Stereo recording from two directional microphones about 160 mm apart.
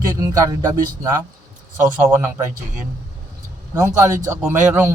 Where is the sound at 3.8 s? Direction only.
20° right (ahead or behind).